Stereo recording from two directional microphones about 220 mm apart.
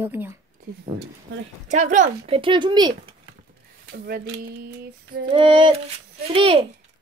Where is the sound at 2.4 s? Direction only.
20° right (ahead or behind).